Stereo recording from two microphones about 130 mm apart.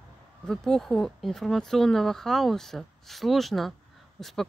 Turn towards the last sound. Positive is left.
turn(degrees=0)  # may be behind; listen again after turning